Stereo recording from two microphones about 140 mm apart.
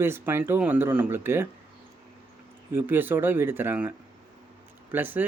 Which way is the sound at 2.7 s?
15° right (ahead or behind).